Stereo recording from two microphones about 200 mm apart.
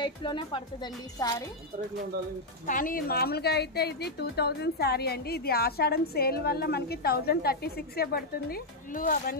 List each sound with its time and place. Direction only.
0.0 s speech: 25° left (ahead or behind)
2.6 s a woman's voice: 40° left (ahead or behind)